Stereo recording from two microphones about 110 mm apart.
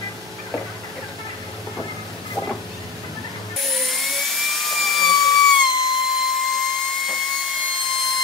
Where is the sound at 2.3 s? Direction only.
20° left (ahead or behind).